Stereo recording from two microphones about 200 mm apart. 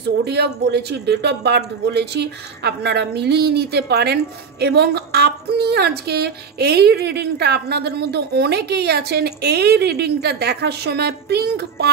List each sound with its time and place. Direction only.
0.2 s speech: 55° right (ahead or behind)